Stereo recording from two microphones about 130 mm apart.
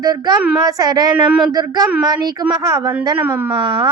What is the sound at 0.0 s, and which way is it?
A woman's voice, 30° right (ahead or behind).